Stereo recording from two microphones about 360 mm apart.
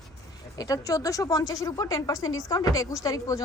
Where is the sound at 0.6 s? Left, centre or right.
Centre.